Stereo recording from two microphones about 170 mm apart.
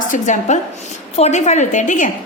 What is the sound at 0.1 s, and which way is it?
A woman's voice, 45° left (ahead or behind).